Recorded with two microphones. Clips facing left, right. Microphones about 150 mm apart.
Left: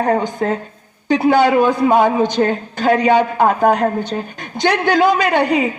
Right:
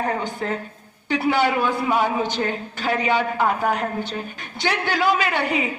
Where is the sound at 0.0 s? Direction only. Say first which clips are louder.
Left 8 dB; 40° left (ahead or behind).